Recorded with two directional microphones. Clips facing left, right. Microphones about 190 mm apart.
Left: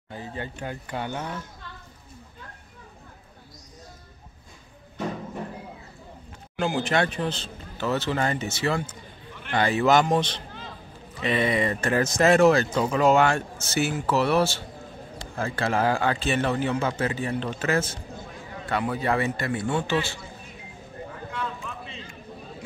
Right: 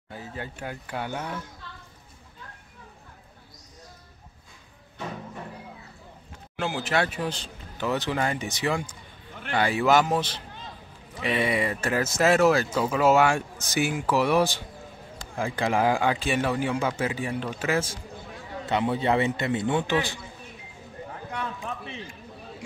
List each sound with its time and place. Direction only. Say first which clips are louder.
0.1 s speech: left 2 dB; 5° right (ahead or behind)
6.6 s speech: left 2 dB; 5° right (ahead or behind)
18.7 s a man's voice: right 2 dB; 25° right (ahead or behind)
21.6 s a sound: right 3 dB; 65° right (ahead or behind)